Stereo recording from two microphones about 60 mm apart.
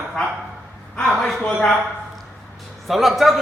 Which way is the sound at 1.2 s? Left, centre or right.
Centre.